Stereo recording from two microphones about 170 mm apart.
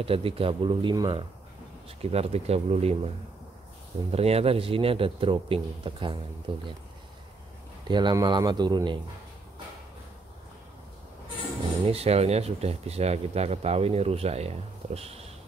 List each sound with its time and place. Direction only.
0.0 s speech: 35° right (ahead or behind)
4.1 s speech: 35° right (ahead or behind)
7.9 s speech: 25° right (ahead or behind)
11.8 s speech: 35° right (ahead or behind)
15.0 s a sound: 35° right (ahead or behind)